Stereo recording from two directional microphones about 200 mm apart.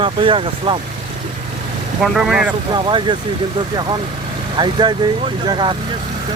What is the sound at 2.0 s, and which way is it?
Speech, centre (ahead or behind).